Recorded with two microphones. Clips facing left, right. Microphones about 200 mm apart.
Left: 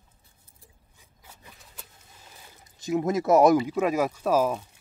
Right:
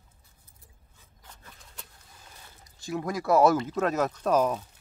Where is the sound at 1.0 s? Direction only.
10° left (ahead or behind).